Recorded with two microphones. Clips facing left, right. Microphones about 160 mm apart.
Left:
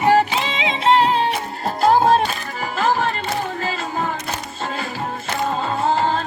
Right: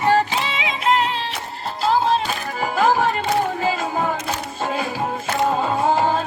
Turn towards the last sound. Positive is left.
turn(degrees=-10)  # may be behind; listen again after turning